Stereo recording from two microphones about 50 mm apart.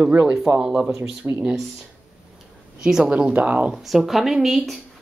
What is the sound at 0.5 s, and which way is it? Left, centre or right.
Speech, centre.